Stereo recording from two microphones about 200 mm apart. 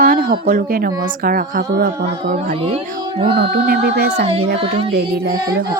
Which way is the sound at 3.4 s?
50° right (ahead or behind).